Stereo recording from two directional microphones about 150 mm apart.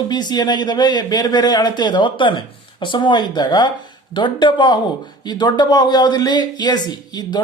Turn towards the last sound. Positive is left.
turn(degrees=30)  # may be behind; listen again after turning